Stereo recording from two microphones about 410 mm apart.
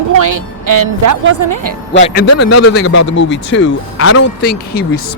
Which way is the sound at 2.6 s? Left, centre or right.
Left.